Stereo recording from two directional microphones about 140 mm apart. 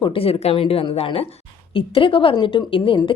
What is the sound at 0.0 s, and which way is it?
A woman's voice, 40° left (ahead or behind).